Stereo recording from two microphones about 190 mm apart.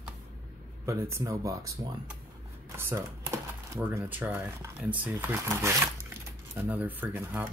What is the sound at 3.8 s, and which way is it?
Speech, 10° right (ahead or behind).